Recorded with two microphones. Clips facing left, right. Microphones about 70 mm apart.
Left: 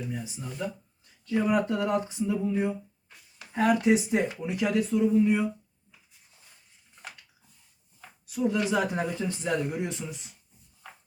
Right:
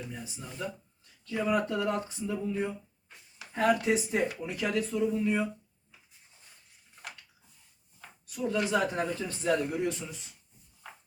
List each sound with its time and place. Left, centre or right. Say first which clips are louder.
1.2 s speech: left 3 dB; left
8.3 s speech: left 2 dB; centre